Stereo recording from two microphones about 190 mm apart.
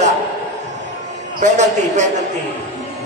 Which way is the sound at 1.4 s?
40° right (ahead or behind).